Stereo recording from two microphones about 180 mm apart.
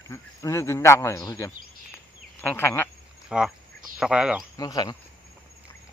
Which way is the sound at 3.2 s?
5° right (ahead or behind).